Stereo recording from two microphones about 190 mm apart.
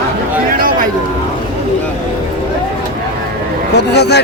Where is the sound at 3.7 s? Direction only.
60° left (ahead or behind).